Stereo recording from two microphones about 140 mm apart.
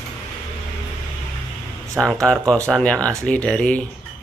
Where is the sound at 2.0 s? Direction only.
5° right (ahead or behind).